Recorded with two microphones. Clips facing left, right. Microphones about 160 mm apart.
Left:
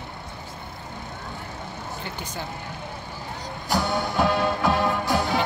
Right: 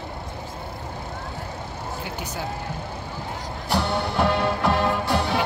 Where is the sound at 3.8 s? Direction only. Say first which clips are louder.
Even; 30° right (ahead or behind).